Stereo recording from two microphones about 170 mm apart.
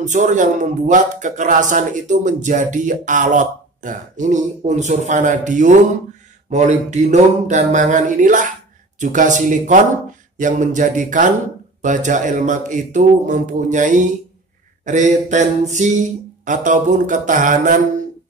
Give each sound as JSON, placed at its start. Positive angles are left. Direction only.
{"t": 0.0, "sound": "speech", "side_deg": -45}